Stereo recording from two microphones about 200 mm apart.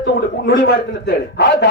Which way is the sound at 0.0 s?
60° left (ahead or behind).